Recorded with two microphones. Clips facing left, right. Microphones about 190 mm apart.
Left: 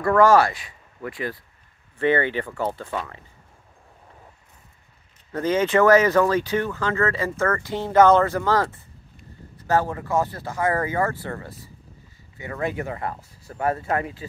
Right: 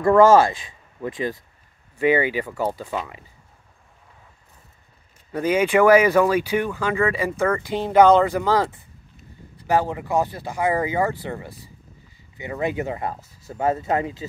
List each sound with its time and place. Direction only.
0.0 s speech: 25° right (ahead or behind)
5.3 s speech: 10° right (ahead or behind)